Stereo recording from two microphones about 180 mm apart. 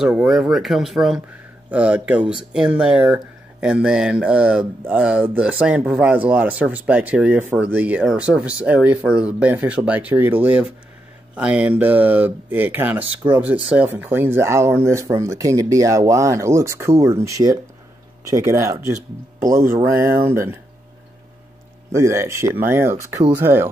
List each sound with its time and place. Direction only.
0.0 s speech: 5° right (ahead or behind)
21.9 s speech: 15° right (ahead or behind)